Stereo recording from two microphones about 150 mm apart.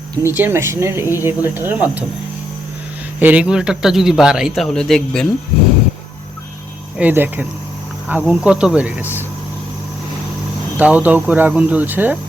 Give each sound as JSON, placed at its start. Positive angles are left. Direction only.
{"t": 0.2, "sound": "speech", "side_deg": -15}
{"t": 3.2, "sound": "speech", "side_deg": -10}
{"t": 7.0, "sound": "speech", "side_deg": -10}
{"t": 10.8, "sound": "speech", "side_deg": -10}